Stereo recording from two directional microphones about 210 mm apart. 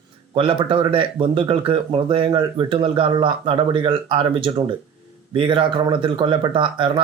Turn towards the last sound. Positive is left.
turn(degrees=-25)  # may be behind; listen again after turning